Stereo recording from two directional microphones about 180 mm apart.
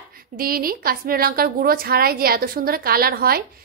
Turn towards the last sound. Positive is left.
turn(degrees=-55)  # may be behind; listen again after turning